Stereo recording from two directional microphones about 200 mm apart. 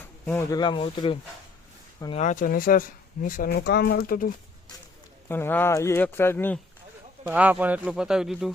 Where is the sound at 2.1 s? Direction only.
40° left (ahead or behind).